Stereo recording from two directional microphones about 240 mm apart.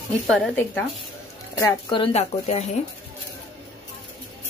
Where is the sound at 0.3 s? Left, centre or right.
Centre.